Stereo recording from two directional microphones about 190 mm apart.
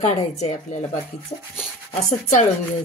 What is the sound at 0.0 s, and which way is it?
Speech, 40° left (ahead or behind).